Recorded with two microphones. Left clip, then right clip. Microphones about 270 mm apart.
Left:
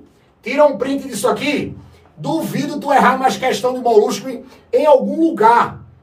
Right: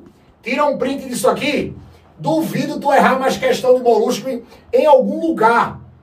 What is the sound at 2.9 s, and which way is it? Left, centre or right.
Speech, left.